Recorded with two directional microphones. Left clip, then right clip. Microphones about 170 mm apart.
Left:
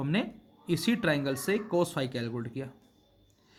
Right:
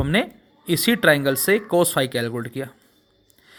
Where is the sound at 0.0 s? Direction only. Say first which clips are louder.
Right 11 dB; 35° right (ahead or behind).